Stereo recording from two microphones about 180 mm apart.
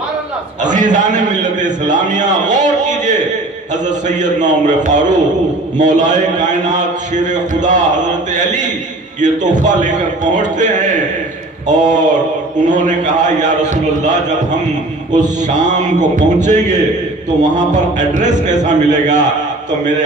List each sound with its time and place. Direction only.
0.6 s a man's voice: 45° right (ahead or behind)